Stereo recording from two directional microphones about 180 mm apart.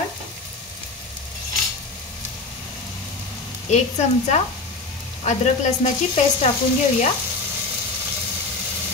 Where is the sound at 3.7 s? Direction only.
40° left (ahead or behind).